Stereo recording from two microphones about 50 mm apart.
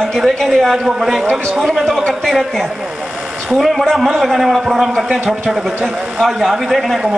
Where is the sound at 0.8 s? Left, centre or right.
Centre.